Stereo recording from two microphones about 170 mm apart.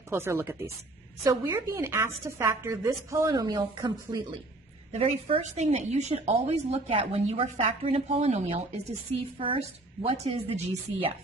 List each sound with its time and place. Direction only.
0.1 s a woman's voice: 15° right (ahead or behind)
4.9 s a woman's voice: 35° right (ahead or behind)